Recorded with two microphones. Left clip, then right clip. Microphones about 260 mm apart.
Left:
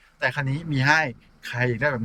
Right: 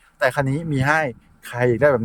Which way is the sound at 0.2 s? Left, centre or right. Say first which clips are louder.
Right 6 dB; centre.